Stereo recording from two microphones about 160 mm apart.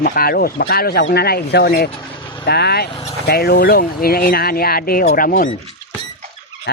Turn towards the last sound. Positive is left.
turn(degrees=90)